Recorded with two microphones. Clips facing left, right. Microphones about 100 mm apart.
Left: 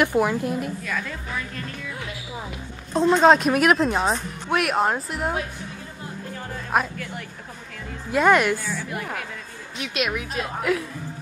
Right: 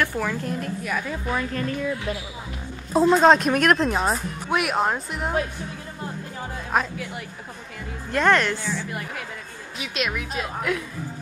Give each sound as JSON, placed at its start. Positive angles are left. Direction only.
{"t": 0.0, "sound": "a woman's voice", "side_deg": 15}
{"t": 0.8, "sound": "a woman's voice", "side_deg": -15}
{"t": 2.9, "sound": "speech", "side_deg": -5}
{"t": 6.7, "sound": "a woman's voice", "side_deg": 0}